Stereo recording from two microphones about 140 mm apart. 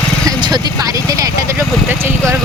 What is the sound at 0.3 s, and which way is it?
Vehicle, 30° right (ahead or behind).